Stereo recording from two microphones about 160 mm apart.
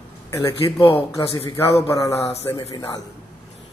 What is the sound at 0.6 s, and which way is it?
Speech, 35° left (ahead or behind).